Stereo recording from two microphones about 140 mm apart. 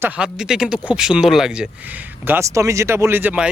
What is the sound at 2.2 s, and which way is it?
Speech, 20° right (ahead or behind).